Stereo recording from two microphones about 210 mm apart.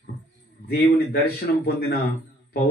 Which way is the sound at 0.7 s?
45° left (ahead or behind).